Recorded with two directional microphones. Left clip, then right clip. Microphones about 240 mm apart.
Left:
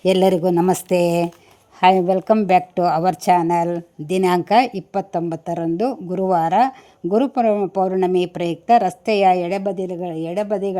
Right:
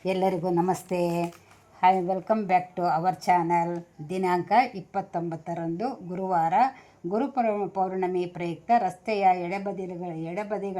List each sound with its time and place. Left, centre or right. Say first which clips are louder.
0.0 s speech: left 10 dB; left